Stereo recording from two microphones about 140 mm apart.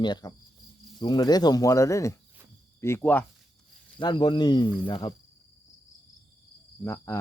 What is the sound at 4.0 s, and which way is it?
Speech, 30° left (ahead or behind).